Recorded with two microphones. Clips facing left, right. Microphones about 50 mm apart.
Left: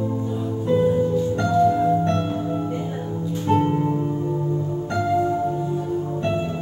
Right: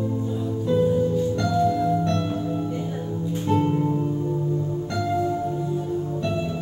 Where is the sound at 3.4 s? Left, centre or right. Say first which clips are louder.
Left 2 dB; left.